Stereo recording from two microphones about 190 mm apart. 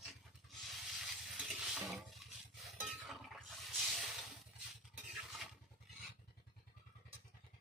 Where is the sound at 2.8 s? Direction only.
Centre (ahead or behind).